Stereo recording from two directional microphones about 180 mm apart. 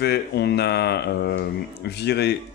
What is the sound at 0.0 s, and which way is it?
Speech, 65° left (ahead or behind).